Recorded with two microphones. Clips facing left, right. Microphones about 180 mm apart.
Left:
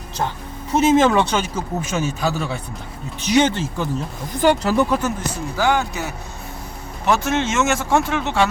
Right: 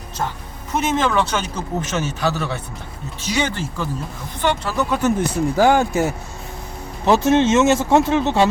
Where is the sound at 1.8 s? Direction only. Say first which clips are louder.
Left 1 dB; 10° left (ahead or behind).